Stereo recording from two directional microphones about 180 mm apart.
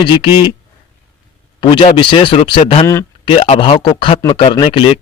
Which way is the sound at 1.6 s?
30° left (ahead or behind).